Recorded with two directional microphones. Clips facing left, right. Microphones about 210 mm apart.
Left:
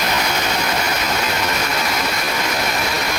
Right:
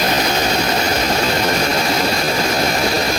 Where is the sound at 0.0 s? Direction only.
35° right (ahead or behind).